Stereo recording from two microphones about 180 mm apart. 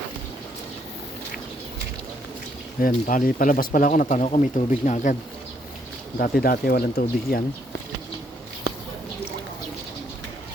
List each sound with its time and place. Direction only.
2.8 s speech: 50° left (ahead or behind)
6.1 s speech: 55° left (ahead or behind)